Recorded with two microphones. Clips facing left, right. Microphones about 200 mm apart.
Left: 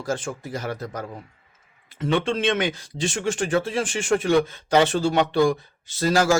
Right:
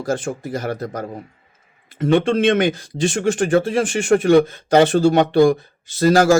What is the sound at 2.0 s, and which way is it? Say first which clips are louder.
Speech: right 7 dB; 50° right (ahead or behind).